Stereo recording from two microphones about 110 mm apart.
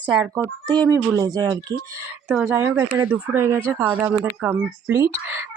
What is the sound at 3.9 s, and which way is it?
Speech, 15° right (ahead or behind).